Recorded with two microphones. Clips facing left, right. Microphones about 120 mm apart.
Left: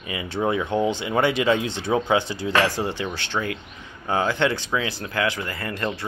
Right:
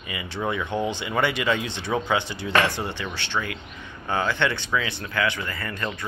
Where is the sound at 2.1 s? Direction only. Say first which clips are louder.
Even; 30° left (ahead or behind).